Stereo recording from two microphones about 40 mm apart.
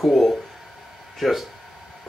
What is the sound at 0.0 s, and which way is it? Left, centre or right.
Speech, centre.